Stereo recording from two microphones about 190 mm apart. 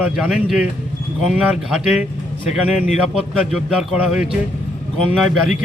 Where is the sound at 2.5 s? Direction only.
35° left (ahead or behind).